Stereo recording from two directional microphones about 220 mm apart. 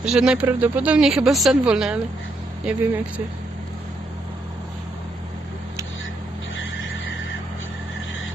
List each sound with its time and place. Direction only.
0.0 s speech: 5° right (ahead or behind)
6.6 s neigh: 60° left (ahead or behind)